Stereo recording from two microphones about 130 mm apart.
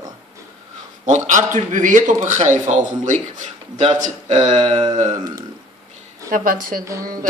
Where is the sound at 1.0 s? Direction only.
70° right (ahead or behind).